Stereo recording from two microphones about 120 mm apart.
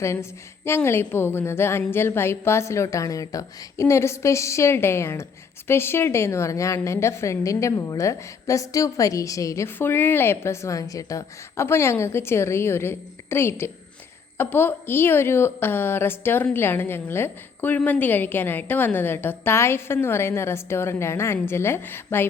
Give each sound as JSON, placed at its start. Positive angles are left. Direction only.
{"t": 0.0, "sound": "a woman's voice", "side_deg": 25}